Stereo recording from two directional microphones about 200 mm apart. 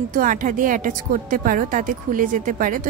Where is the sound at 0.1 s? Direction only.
40° right (ahead or behind).